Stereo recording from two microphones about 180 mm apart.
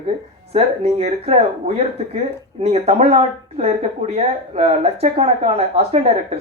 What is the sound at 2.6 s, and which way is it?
Speech, 35° right (ahead or behind).